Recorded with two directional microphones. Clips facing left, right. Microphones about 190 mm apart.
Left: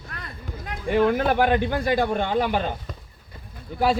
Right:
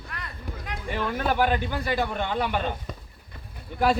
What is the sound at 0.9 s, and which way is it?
A man's voice, 55° left (ahead or behind).